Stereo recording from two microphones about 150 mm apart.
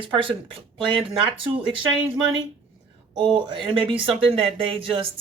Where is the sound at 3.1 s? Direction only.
30° right (ahead or behind).